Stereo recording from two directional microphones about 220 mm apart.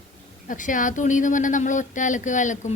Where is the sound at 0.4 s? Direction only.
35° left (ahead or behind).